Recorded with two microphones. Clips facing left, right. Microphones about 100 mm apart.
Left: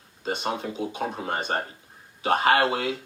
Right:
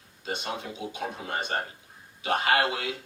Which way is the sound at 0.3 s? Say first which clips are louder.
Left 5 dB; 40° left (ahead or behind).